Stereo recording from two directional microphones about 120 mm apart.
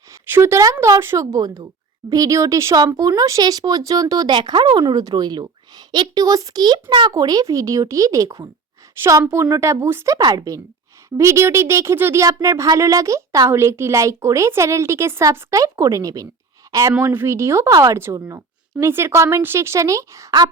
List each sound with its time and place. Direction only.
0.1 s speech: 20° right (ahead or behind)
10.2 s speech: 35° right (ahead or behind)